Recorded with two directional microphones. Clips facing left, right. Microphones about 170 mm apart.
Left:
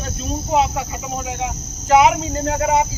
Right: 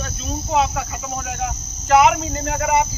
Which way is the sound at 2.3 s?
30° left (ahead or behind).